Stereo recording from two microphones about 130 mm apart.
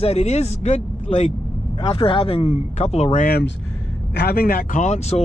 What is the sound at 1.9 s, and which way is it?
Speech, 45° left (ahead or behind).